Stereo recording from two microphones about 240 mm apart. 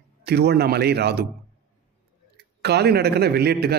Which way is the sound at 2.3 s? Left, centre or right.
Right.